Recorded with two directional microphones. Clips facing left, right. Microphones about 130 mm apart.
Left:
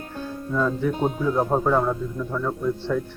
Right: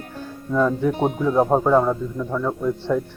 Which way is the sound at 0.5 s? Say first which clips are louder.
Right 4 dB; 15° right (ahead or behind).